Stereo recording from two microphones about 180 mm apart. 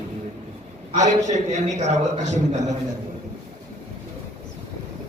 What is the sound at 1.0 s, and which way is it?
A man's voice, 40° right (ahead or behind).